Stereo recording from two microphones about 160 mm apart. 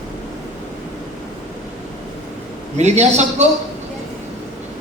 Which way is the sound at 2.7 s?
45° right (ahead or behind).